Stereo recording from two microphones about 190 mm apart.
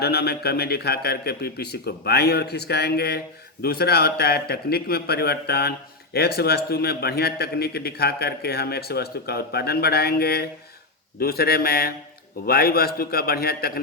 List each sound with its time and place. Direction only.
0.0 s a man's voice: 55° left (ahead or behind)